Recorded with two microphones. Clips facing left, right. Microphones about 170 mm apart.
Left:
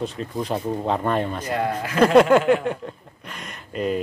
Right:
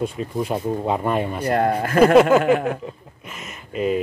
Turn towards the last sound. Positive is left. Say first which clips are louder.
# right 3 dB
turn(degrees=-5)  # may be behind; listen again after turning